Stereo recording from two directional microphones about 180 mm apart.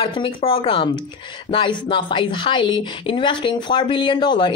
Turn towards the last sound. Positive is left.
turn(degrees=25)  # may be behind; listen again after turning